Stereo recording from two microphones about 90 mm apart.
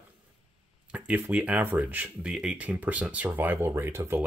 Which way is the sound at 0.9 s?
15° right (ahead or behind).